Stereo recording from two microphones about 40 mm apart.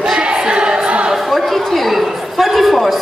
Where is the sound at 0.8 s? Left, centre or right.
Right.